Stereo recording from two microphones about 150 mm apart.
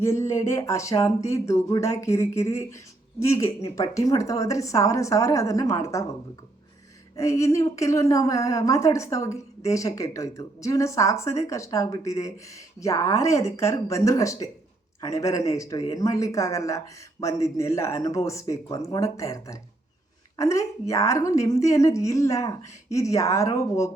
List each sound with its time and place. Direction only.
0.0 s a woman's voice: 20° left (ahead or behind)
7.2 s a woman's voice: 20° left (ahead or behind)